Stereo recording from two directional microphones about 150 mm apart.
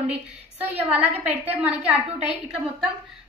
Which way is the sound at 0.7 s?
10° right (ahead or behind).